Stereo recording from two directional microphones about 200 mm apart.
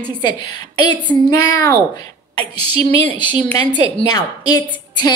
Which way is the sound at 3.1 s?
25° left (ahead or behind).